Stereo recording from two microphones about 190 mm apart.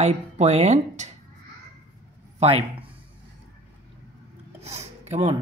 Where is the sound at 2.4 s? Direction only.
30° right (ahead or behind).